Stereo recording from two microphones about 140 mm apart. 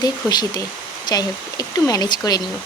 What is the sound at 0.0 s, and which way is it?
Speech, 30° left (ahead or behind).